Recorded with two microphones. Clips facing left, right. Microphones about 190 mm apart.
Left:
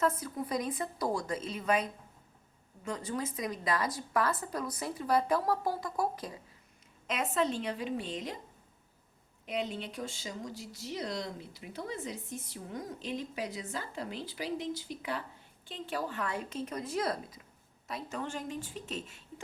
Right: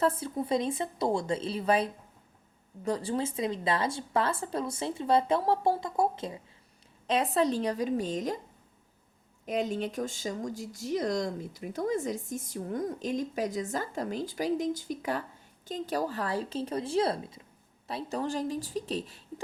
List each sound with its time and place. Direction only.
0.0 s a woman's voice: 30° right (ahead or behind)
7.1 s a woman's voice: 35° right (ahead or behind)
9.5 s a woman's voice: 45° right (ahead or behind)